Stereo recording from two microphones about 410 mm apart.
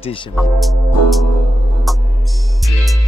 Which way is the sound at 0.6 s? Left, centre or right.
Centre.